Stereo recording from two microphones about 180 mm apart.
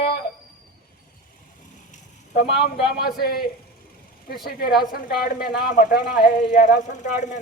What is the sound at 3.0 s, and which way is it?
Speech, 55° left (ahead or behind).